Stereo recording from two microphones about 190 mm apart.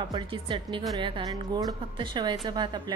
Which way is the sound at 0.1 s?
25° right (ahead or behind).